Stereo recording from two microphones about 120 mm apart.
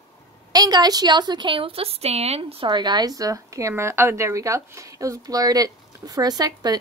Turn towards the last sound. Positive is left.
turn(degrees=-35)  # may be behind; listen again after turning